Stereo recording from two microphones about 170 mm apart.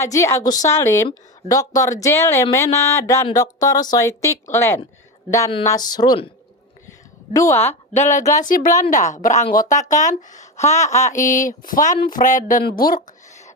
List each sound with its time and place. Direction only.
0.0 s a woman's voice: 15° left (ahead or behind)
7.3 s a woman's voice: 15° left (ahead or behind)
8.4 s speech: 55° left (ahead or behind)